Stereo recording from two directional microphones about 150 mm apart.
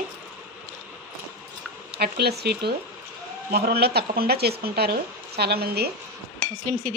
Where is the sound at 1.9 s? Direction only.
90° right.